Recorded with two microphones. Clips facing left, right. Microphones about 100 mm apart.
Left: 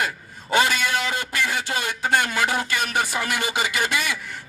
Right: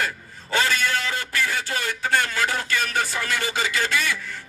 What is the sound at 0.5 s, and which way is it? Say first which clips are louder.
Speech: left 2 dB; 15° left (ahead or behind).